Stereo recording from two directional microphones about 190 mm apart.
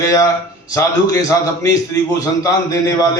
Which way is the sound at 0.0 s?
15° left (ahead or behind).